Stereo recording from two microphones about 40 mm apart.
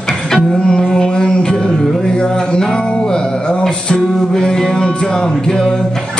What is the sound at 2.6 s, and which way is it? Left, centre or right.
Music, centre.